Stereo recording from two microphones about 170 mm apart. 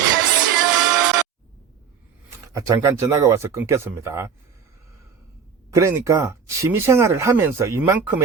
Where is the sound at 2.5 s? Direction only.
20° right (ahead or behind).